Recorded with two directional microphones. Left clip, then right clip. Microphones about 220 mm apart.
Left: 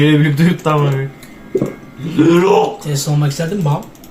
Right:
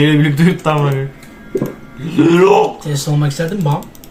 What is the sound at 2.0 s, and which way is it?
Speech, 15° right (ahead or behind).